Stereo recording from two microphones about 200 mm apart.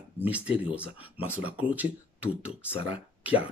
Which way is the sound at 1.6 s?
5° right (ahead or behind).